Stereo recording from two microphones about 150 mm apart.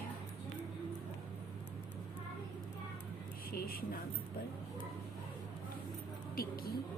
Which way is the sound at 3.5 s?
85° left.